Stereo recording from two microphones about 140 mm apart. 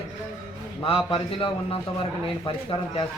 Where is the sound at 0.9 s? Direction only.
40° left (ahead or behind).